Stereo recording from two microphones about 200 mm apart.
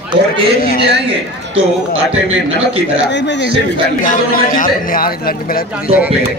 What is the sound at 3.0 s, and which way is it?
Speech, 60° left (ahead or behind).